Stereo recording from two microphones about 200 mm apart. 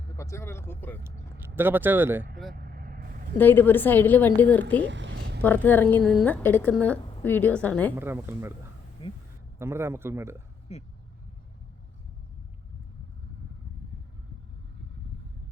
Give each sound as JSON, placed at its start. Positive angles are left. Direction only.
{"t": 0.2, "sound": "a woman's voice", "side_deg": 15}
{"t": 1.0, "sound": "speech", "side_deg": -10}
{"t": 2.5, "sound": "vehicle", "side_deg": -50}
{"t": 3.3, "sound": "a woman's voice", "side_deg": 10}
{"t": 4.8, "sound": "a sound", "side_deg": -65}
{"t": 5.4, "sound": "a woman's voice", "side_deg": 10}
{"t": 7.9, "sound": "speech", "side_deg": -10}
{"t": 9.0, "sound": "speech", "side_deg": 30}
{"t": 9.6, "sound": "speech", "side_deg": -15}
{"t": 10.7, "sound": "speech", "side_deg": 30}